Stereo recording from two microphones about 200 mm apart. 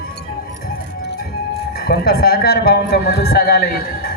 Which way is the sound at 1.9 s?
50° left (ahead or behind).